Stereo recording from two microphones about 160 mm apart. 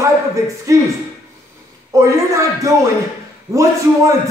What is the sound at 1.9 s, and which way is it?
Speech, 20° right (ahead or behind).